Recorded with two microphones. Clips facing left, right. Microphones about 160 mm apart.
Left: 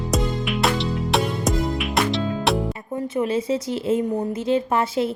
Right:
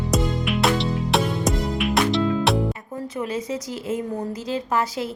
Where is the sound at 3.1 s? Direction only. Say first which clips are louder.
Left 5 dB; 30° left (ahead or behind).